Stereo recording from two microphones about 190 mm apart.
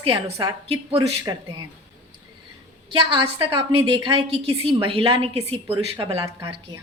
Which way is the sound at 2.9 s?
25° right (ahead or behind).